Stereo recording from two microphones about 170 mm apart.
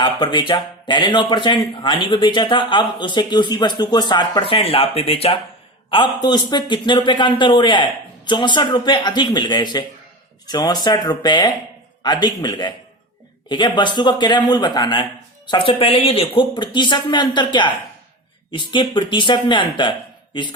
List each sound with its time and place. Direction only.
0.0 s speech: 25° left (ahead or behind)